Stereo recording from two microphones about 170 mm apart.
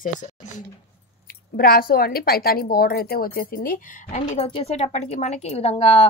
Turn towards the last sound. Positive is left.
turn(degrees=35)  # may be behind; listen again after turning